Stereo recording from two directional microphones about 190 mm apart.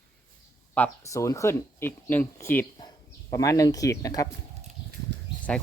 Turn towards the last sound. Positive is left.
turn(degrees=5)  # may be behind; listen again after turning